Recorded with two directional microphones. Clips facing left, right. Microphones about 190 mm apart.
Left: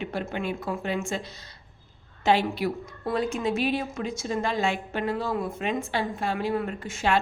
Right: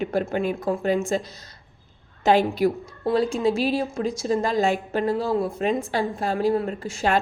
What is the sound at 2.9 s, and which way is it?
A woman's voice, 30° right (ahead or behind).